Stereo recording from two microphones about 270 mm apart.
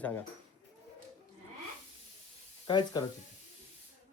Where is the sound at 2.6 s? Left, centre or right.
Centre.